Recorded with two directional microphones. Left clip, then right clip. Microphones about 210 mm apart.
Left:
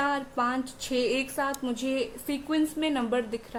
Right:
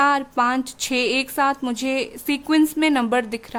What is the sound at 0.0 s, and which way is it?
A woman's voice, 50° right (ahead or behind).